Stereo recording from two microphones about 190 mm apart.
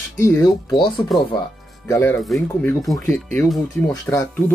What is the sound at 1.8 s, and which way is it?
Speech, 10° left (ahead or behind).